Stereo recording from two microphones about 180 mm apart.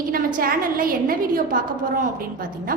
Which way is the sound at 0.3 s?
50° right (ahead or behind).